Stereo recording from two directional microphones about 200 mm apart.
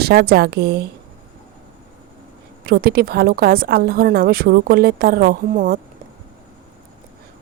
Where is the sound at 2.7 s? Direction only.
50° right (ahead or behind).